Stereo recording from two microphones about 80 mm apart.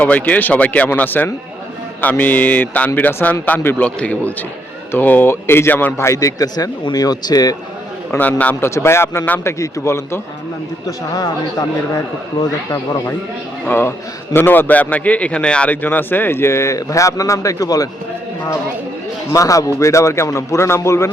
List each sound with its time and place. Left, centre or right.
0.0 s a man's voice: centre
6.1 s speech: left
8.2 s a man's voice: left
8.6 s speech: left
10.8 s speech: left
13.7 s a man's voice: left; by 15.7 s centre
15.7 s speech: left
19.3 s speech: left